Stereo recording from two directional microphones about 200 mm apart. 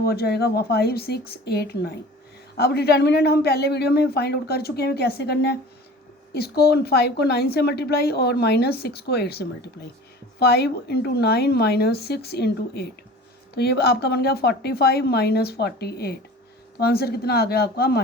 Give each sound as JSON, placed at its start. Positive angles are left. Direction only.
{"t": 0.0, "sound": "a woman's voice", "side_deg": 50}